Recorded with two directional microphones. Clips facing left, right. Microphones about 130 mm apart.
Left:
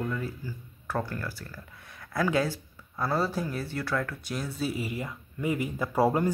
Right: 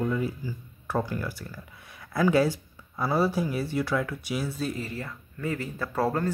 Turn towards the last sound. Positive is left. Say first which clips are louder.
# left 2 dB
turn(degrees=15)  # may be behind; listen again after turning